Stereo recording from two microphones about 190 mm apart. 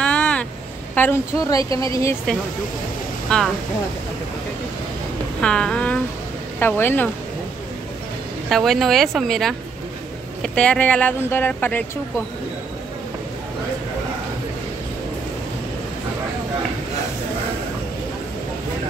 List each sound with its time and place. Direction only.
0.0 s vehicle: 5° left (ahead or behind)
0.9 s speech: 10° left (ahead or behind)
3.3 s speech: 5° left (ahead or behind)
5.4 s speech: 5° left (ahead or behind)
8.5 s speech: centre (ahead or behind)